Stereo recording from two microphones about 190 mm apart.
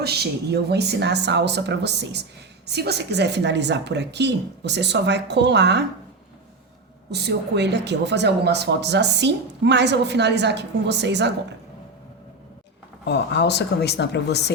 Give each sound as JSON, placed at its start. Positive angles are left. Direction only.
{"t": 0.0, "sound": "speech", "side_deg": -60}
{"t": 7.1, "sound": "speech", "side_deg": -60}
{"t": 13.1, "sound": "speech", "side_deg": 60}